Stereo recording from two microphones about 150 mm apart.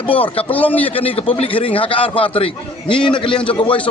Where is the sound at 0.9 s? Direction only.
40° left (ahead or behind).